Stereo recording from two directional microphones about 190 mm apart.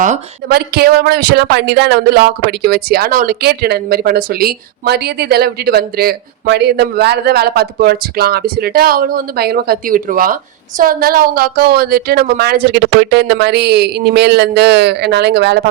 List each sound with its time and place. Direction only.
0.0 s a woman's voice: 45° right (ahead or behind)